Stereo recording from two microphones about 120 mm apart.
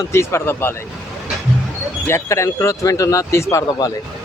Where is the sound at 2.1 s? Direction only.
20° left (ahead or behind).